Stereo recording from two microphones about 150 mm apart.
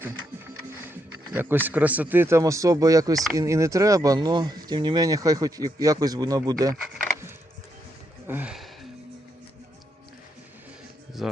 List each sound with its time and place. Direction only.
0.9 s speech: 15° right (ahead or behind)
8.3 s speech: 10° right (ahead or behind)
11.2 s music: centre (ahead or behind)